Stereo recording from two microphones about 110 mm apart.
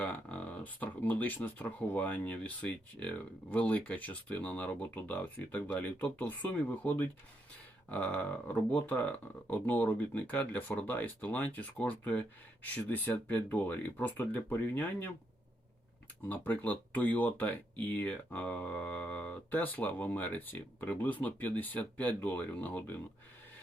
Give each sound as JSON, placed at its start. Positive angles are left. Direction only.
{"t": 0.0, "sound": "speech", "side_deg": 15}
{"t": 16.3, "sound": "speech", "side_deg": 15}